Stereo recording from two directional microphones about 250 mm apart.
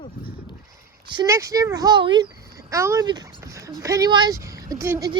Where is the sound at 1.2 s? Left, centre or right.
Centre.